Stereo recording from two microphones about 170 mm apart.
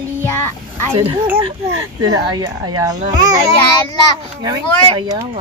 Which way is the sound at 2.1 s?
25° right (ahead or behind).